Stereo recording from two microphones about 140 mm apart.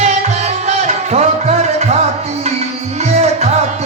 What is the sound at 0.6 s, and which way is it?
Music, 55° right (ahead or behind).